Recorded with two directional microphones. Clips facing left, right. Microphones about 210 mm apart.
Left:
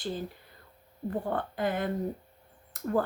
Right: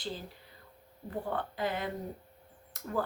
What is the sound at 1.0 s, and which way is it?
Speech, 50° left (ahead or behind).